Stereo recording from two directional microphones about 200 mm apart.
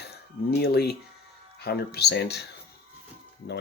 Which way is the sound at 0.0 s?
55° left (ahead or behind).